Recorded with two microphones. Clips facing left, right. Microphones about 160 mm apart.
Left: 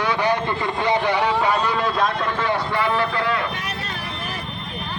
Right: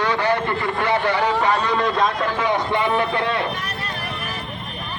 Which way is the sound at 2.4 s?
15° right (ahead or behind).